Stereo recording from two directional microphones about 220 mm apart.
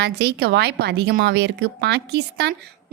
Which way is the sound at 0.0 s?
50° right (ahead or behind).